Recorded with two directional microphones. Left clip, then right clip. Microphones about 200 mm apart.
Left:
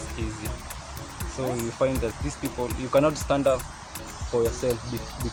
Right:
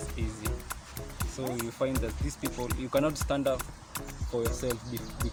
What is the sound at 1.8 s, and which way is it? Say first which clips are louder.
Speech: left 7 dB; 45° right (ahead or behind).